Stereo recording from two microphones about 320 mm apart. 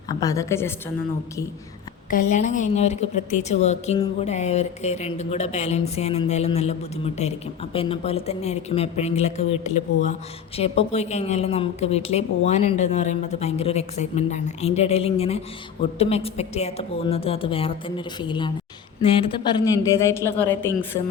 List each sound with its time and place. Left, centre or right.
0.1 s a woman's voice: centre
2.0 s speech: left; by 21.0 s centre